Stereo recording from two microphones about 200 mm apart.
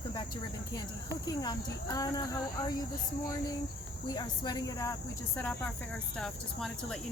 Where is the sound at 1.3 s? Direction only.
20° left (ahead or behind).